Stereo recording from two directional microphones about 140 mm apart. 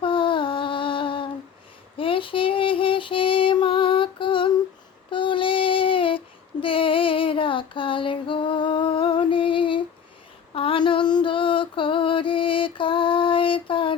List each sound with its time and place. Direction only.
0.0 s music: 40° left (ahead or behind)
2.0 s female singing: 40° left (ahead or behind)
5.1 s child singing: 35° left (ahead or behind)
10.5 s female singing: 40° left (ahead or behind)